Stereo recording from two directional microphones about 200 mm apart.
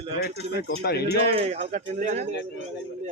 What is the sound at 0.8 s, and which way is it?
Speech, 55° left (ahead or behind).